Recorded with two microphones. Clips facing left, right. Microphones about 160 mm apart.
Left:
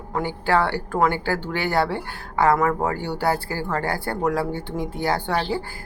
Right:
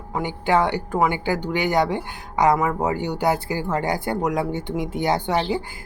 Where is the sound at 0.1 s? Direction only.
15° right (ahead or behind).